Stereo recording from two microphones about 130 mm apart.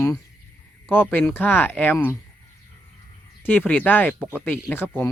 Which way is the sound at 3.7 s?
15° left (ahead or behind).